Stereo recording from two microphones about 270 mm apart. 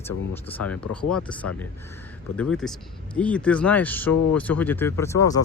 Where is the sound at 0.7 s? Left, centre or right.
Centre.